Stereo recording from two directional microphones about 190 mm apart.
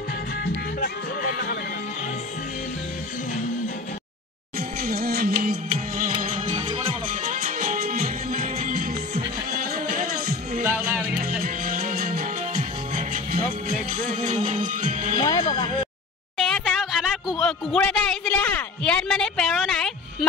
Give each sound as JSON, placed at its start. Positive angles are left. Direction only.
{"t": 0.7, "sound": "music", "side_deg": 50}
{"t": 4.6, "sound": "music", "side_deg": -55}
{"t": 6.2, "sound": "music", "side_deg": -40}
{"t": 15.1, "sound": "music", "side_deg": 20}
{"t": 16.3, "sound": "a sound", "side_deg": 0}